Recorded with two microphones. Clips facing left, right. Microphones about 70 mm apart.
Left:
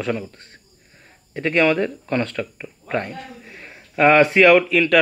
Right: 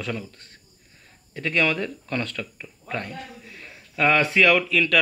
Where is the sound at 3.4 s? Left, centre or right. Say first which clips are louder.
Left 3 dB; left.